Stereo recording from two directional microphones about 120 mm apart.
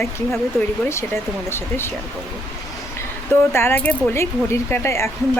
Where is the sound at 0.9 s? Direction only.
20° left (ahead or behind).